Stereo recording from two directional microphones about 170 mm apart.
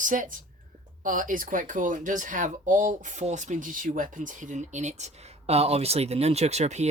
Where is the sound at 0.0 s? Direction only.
50° right (ahead or behind).